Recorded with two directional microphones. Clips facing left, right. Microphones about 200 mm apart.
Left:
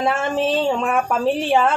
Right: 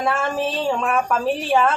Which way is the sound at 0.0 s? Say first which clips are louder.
Left 2 dB; 25° left (ahead or behind).